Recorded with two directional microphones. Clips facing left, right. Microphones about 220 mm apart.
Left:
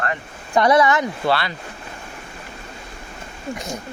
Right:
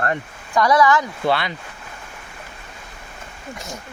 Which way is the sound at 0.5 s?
25° left (ahead or behind).